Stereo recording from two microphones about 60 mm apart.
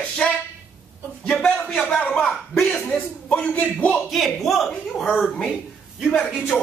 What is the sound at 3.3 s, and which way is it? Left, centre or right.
Speech, left.